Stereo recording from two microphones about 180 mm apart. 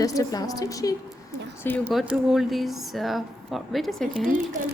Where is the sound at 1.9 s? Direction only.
5° right (ahead or behind).